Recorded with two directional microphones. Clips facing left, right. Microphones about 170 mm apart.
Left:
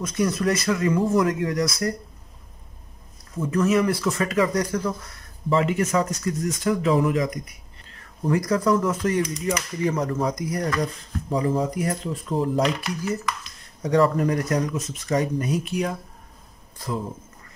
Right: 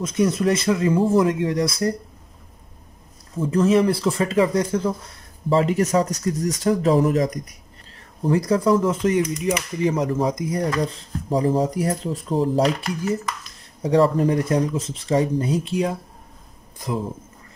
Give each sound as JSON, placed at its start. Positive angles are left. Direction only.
{"t": 0.0, "sound": "speech", "side_deg": -25}
{"t": 3.4, "sound": "speech", "side_deg": -30}
{"t": 5.5, "sound": "speech", "side_deg": -35}
{"t": 13.8, "sound": "speech", "side_deg": -30}